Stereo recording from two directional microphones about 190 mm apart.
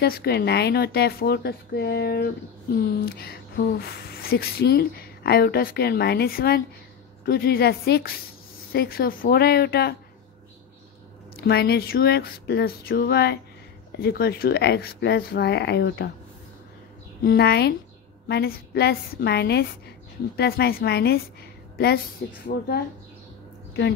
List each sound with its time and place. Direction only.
0.0 s a woman's voice: 55° left (ahead or behind)
11.3 s a woman's voice: 55° left (ahead or behind)
17.2 s a woman's voice: 55° left (ahead or behind)